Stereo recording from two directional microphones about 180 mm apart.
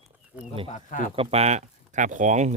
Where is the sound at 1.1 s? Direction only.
35° right (ahead or behind).